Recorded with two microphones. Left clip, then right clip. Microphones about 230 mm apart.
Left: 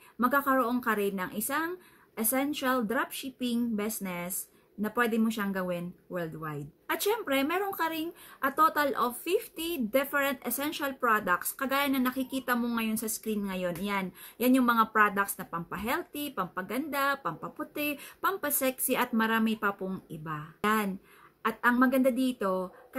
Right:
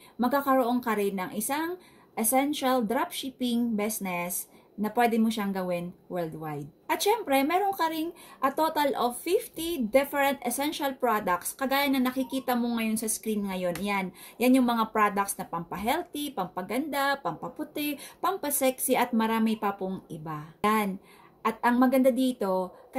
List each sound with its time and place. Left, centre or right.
0.2 s a woman's voice: centre